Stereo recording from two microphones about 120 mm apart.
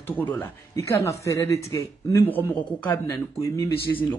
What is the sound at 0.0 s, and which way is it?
Speech, 15° left (ahead or behind).